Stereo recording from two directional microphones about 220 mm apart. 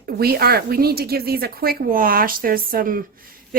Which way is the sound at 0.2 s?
45° right (ahead or behind).